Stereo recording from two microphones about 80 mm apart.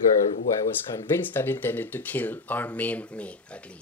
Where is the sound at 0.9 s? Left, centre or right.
Left.